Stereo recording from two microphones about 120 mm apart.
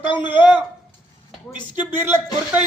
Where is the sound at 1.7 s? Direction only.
15° right (ahead or behind).